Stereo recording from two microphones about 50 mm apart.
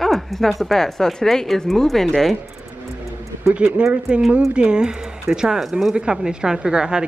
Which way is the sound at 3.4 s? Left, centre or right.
Right.